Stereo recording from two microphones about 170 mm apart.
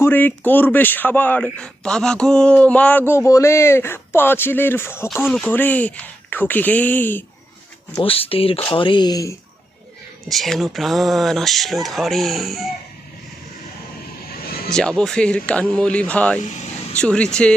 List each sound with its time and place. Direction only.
0.0 s speech: 10° left (ahead or behind)
5.0 s speech: 5° right (ahead or behind)
5.3 s speech: 10° left (ahead or behind)
7.9 s speech: 35° left (ahead or behind)
10.2 s speech: centre (ahead or behind)
14.7 s speech: 5° left (ahead or behind)